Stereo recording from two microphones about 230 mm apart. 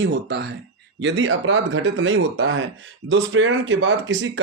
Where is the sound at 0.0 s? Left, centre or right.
Right.